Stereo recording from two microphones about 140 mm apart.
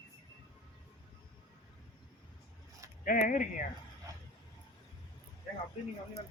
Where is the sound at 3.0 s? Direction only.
75° left (ahead or behind).